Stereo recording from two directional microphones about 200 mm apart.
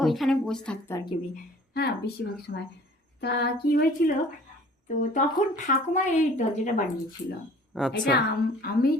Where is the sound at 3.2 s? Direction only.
60° left (ahead or behind).